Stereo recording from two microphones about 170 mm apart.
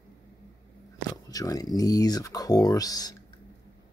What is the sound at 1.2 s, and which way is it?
Speech, 20° left (ahead or behind).